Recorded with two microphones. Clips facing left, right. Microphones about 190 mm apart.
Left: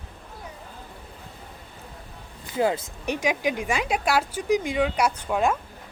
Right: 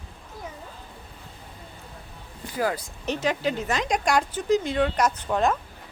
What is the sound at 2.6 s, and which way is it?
Speech, 25° left (ahead or behind).